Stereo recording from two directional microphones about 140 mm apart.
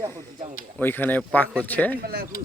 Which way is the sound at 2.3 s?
90° left.